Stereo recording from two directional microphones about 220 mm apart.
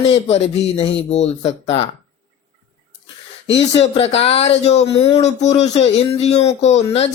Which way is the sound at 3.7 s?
30° left (ahead or behind).